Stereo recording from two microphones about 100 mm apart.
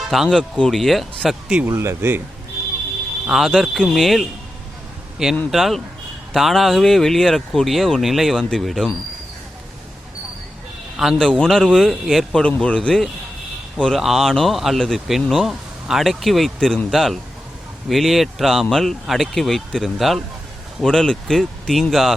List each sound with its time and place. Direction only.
0.0 s speech: centre (ahead or behind)
1.6 s speech: 30° right (ahead or behind)
3.2 s speech: 5° right (ahead or behind)
5.5 s speech: centre (ahead or behind)
10.9 s speech: centre (ahead or behind)